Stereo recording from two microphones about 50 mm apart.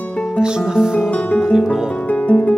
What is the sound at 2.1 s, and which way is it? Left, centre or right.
Music, left.